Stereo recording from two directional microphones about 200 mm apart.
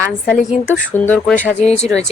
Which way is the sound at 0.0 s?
10° left (ahead or behind).